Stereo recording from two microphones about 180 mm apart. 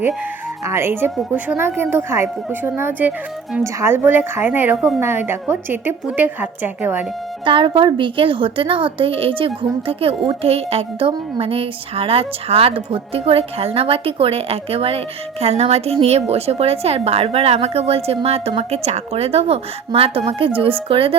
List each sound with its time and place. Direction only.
0.6 s a woman's voice: 15° right (ahead or behind)
7.4 s a woman's voice: 30° right (ahead or behind)